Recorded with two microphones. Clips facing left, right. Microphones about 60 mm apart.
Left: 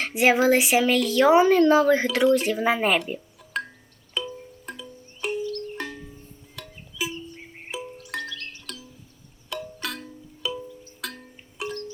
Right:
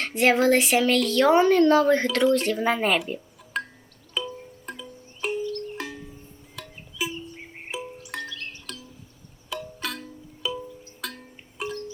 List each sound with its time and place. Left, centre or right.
0.0 s a woman's voice: centre
3.1 s music: centre
8.2 s music: centre
8.7 s music: centre
11.0 s wind chime: centre